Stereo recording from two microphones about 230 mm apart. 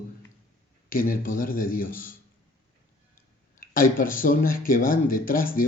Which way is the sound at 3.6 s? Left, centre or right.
Left.